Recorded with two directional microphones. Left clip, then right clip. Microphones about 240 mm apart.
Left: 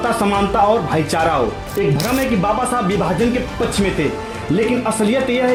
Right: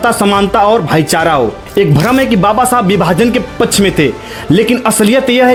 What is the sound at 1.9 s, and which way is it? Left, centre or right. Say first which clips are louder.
Speech: right 8 dB; centre.